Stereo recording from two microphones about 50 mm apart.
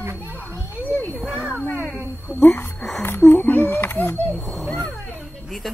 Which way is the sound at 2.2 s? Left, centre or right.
Left.